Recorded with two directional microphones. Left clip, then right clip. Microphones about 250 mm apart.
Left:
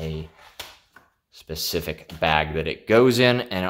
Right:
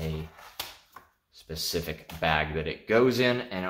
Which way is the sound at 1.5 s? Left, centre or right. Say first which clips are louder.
Left 5 dB; left.